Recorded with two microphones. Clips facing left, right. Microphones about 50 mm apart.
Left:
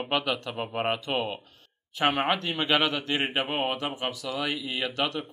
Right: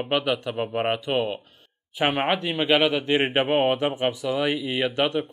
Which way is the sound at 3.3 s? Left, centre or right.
Right.